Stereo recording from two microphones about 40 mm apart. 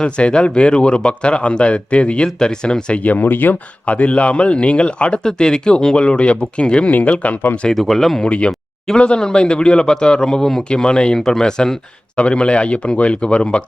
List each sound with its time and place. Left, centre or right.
0.0 s a man's voice: left
3.0 s speech: left
3.2 s speech: left
3.8 s a man's voice: left
7.7 s speech: centre
8.3 s a man's voice: left
12.1 s a man's voice: left